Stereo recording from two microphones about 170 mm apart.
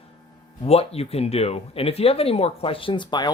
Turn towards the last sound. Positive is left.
turn(degrees=25)  # may be behind; listen again after turning